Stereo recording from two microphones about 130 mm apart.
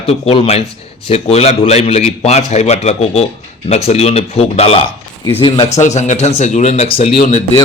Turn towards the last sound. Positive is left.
turn(degrees=50)  # may be behind; listen again after turning